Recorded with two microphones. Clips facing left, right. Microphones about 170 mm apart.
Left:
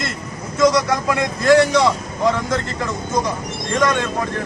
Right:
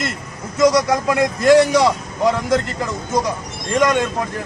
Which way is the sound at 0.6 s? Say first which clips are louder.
Right 1 dB; 15° right (ahead or behind).